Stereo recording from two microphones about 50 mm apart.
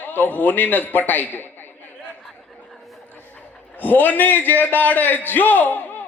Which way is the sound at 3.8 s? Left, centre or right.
Left.